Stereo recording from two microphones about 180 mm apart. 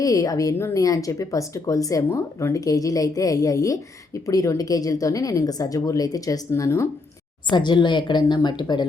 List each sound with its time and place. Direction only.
0.0 s speech: 20° left (ahead or behind)